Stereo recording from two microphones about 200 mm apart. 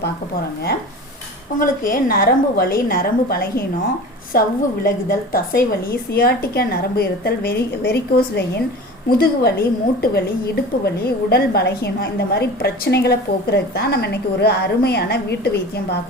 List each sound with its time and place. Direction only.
1.5 s a woman's voice: 45° left (ahead or behind)